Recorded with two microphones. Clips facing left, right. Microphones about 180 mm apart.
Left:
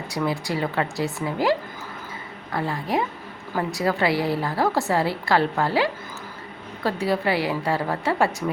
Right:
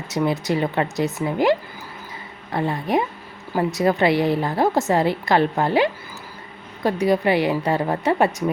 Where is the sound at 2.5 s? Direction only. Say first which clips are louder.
Right 3 dB; 20° right (ahead or behind).